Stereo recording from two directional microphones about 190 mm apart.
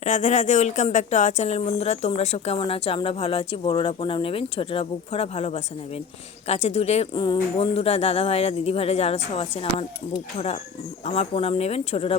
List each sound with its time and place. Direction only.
0.0 s a woman's voice: 40° left (ahead or behind)